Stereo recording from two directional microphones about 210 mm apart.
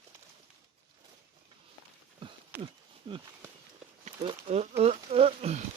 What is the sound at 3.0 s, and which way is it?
Speech, 25° right (ahead or behind).